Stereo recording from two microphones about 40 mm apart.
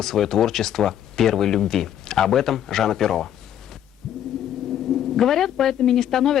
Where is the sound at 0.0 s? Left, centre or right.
Centre.